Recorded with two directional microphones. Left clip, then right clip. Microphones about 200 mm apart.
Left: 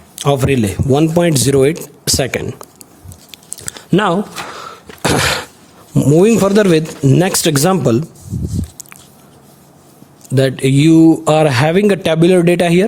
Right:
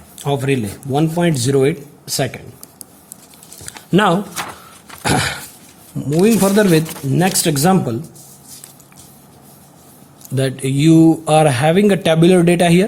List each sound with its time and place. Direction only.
0.2 s a man's voice: 45° left (ahead or behind)
3.9 s speech: 30° left (ahead or behind)
5.0 s a man's voice: 40° left (ahead or behind)
10.3 s speech: 30° left (ahead or behind)